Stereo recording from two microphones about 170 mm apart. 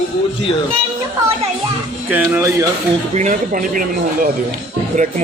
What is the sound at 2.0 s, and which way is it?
Speech, 10° right (ahead or behind).